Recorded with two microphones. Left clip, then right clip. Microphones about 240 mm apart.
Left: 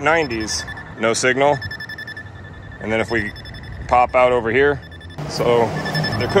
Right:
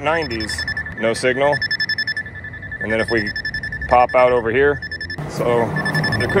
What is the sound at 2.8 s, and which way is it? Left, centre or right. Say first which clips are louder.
Speech: right 1 dB; centre.